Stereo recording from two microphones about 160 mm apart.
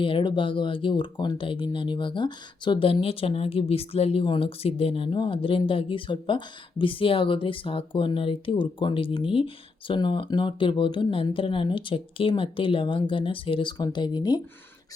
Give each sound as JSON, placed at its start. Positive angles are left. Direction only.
{"t": 0.0, "sound": "speech", "side_deg": 30}